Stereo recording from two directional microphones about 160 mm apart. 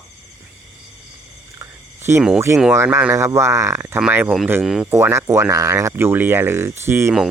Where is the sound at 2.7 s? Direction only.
15° right (ahead or behind).